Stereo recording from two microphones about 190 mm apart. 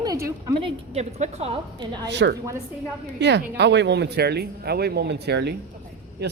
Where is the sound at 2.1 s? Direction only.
65° right (ahead or behind).